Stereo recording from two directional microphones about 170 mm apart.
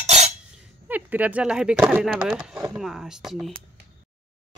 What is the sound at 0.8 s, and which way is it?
Speech, 10° right (ahead or behind).